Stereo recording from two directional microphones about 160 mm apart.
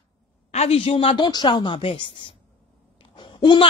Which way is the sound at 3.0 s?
30° left (ahead or behind).